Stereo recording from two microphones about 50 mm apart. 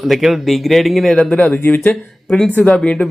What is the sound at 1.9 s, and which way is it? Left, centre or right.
Speech, centre.